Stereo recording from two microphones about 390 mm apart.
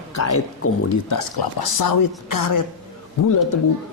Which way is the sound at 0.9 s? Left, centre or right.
Left.